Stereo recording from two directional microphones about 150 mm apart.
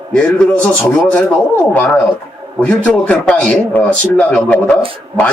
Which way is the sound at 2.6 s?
10° left (ahead or behind).